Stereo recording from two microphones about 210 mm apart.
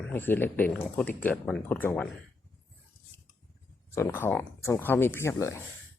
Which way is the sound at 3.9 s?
10° left (ahead or behind).